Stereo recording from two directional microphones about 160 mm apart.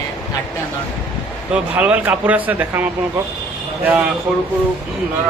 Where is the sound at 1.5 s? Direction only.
10° right (ahead or behind).